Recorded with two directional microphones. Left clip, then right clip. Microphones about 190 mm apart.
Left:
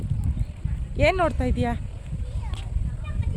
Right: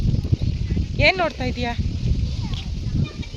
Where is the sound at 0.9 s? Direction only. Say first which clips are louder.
Right 3 dB; 15° left (ahead or behind).